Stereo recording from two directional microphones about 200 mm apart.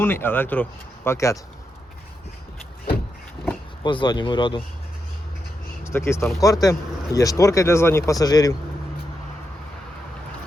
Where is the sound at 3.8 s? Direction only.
25° left (ahead or behind).